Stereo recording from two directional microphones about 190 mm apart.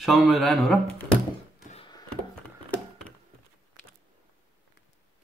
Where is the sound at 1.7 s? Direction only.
25° left (ahead or behind).